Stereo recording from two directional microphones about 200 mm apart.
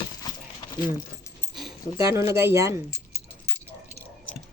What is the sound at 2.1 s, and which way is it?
Speech, 15° right (ahead or behind).